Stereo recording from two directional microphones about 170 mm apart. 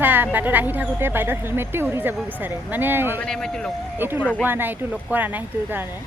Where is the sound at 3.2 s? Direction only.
5° left (ahead or behind).